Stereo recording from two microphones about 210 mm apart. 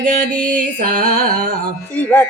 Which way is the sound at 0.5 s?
40° right (ahead or behind).